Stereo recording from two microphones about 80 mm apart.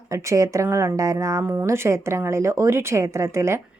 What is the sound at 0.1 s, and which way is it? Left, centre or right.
A woman's voice, right.